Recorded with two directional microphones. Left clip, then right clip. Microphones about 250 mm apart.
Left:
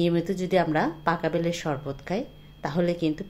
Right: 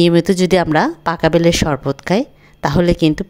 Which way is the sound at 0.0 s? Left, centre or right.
Right.